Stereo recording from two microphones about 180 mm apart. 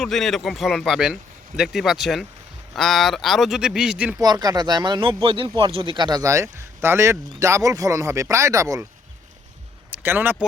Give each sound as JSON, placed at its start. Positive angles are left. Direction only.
{"t": 0.0, "sound": "speech", "side_deg": 0}
{"t": 4.2, "sound": "speech", "side_deg": -20}
{"t": 9.9, "sound": "speech", "side_deg": -10}